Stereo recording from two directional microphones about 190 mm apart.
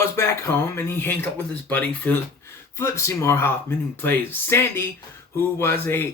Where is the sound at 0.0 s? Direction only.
15° left (ahead or behind).